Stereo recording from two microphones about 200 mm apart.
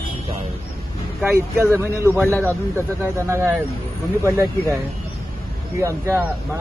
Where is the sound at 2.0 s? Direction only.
10° left (ahead or behind).